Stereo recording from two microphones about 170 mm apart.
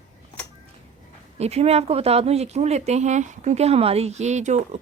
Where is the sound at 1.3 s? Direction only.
40° right (ahead or behind).